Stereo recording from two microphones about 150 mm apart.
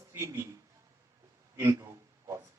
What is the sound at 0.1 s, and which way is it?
Speech, 15° right (ahead or behind).